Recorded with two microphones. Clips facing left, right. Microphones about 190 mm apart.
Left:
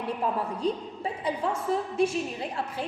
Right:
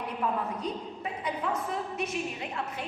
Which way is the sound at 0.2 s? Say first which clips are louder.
Even; 30° left (ahead or behind).